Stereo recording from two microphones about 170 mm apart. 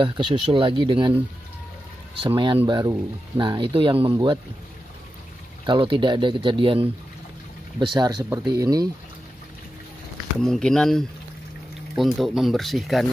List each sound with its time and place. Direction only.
0.0 s speech: 30° right (ahead or behind)
5.7 s speech: 30° right (ahead or behind)
10.4 s speech: 5° left (ahead or behind)